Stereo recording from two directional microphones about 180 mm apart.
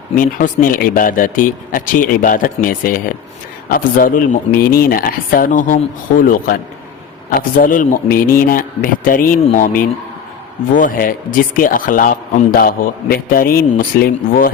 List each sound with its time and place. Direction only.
0.2 s speech: 50° left (ahead or behind)